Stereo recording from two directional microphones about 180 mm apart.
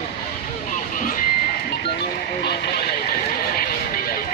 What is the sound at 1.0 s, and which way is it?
Vehicle, 50° left (ahead or behind).